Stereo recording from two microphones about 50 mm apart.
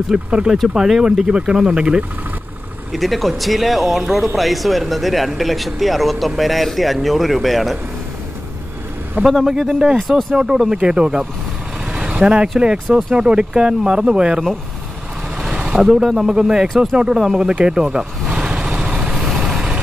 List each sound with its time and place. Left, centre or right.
0.1 s speech: centre
2.9 s speech: centre
9.2 s speech: right
9.9 s speech: centre
10.3 s speech: centre
15.3 s vehicle: centre
16.3 s speech: centre
17.2 s speech: centre
17.6 s speech: centre
18.3 s vehicle: centre